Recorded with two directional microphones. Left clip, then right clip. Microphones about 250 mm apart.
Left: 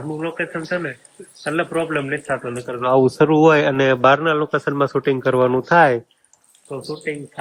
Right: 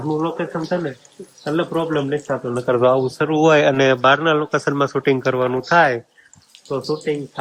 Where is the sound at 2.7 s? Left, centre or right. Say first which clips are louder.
Right 13 dB; right.